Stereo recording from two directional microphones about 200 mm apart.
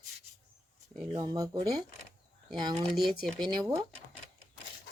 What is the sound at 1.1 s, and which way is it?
Speech, 20° right (ahead or behind).